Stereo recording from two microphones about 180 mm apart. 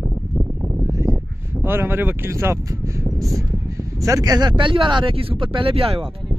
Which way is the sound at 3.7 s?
20° right (ahead or behind).